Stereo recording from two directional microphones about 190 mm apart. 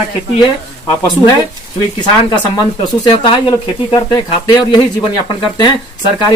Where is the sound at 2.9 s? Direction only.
25° left (ahead or behind).